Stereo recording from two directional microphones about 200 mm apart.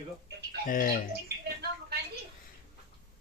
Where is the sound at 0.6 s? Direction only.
45° left (ahead or behind).